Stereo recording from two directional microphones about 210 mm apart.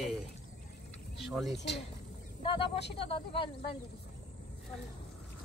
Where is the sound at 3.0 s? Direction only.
25° left (ahead or behind).